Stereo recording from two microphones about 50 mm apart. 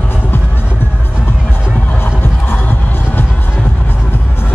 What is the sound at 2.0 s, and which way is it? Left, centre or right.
Music, left.